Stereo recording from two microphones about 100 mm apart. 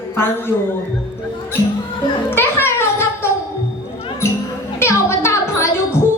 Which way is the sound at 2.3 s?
20° left (ahead or behind).